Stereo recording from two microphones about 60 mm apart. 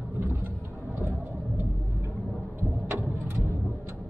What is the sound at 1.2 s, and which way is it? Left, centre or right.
Vehicle, right.